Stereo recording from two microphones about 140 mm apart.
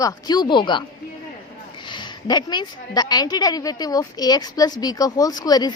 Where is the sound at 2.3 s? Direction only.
30° left (ahead or behind).